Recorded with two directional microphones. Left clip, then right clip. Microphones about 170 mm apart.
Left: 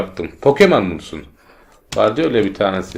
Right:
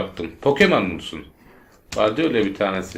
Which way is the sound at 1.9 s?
45° left (ahead or behind).